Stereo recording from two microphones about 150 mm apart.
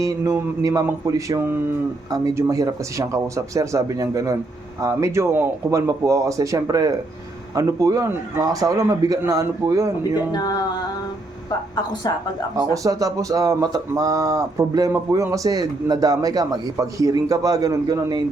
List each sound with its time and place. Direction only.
0.0 s speech: 20° right (ahead or behind)
10.0 s speech: 25° left (ahead or behind)
12.7 s speech: 20° right (ahead or behind)